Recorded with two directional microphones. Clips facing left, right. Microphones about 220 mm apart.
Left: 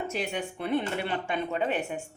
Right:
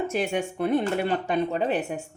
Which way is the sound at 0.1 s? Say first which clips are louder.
Right 6 dB; 50° right (ahead or behind).